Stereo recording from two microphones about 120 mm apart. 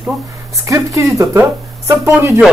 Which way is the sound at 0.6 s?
25° right (ahead or behind).